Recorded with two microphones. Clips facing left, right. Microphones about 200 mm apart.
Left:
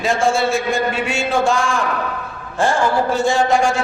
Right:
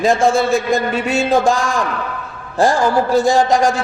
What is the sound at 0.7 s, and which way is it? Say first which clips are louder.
Speech: right 3 dB; 35° right (ahead or behind).